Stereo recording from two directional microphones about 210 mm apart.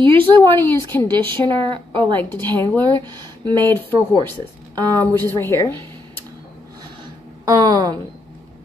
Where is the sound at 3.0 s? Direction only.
20° right (ahead or behind).